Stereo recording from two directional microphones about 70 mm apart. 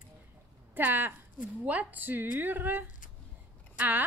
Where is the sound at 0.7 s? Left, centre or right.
Right.